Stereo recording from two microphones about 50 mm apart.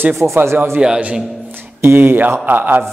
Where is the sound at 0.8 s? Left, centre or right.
Right.